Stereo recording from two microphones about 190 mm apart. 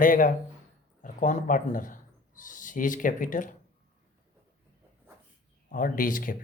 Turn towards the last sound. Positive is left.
turn(degrees=45)  # may be behind; listen again after turning